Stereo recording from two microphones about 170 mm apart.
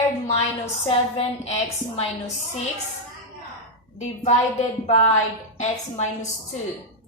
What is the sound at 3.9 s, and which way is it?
Speech, 40° left (ahead or behind).